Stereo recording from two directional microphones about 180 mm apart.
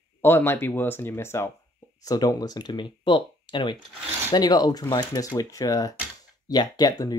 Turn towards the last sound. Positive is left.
turn(degrees=20)  # may be behind; listen again after turning